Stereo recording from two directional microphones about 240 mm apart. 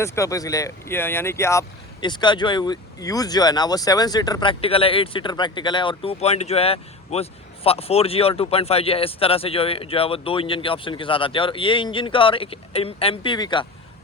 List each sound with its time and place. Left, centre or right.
0.0 s speech: centre